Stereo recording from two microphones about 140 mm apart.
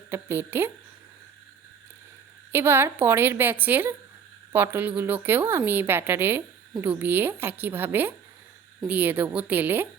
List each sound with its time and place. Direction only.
0.1 s a woman's voice: 15° right (ahead or behind)
2.5 s a woman's voice: 15° right (ahead or behind)